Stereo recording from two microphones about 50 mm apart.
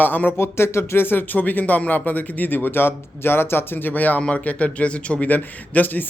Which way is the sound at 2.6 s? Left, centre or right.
Left.